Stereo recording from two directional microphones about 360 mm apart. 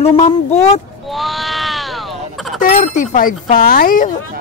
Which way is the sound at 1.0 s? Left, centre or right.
Centre.